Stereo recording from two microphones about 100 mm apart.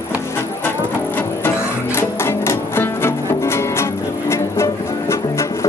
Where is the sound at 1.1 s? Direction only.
20° left (ahead or behind).